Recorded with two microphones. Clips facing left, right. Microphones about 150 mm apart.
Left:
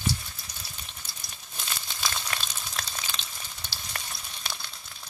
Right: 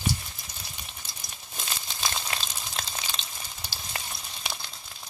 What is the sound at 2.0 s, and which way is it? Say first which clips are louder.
Frying: right 1 dB; 20° right (ahead or behind).